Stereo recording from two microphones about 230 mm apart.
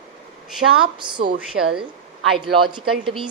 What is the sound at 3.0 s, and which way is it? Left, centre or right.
Speech, right.